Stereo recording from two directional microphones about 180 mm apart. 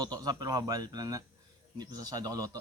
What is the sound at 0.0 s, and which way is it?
Speech, 20° right (ahead or behind).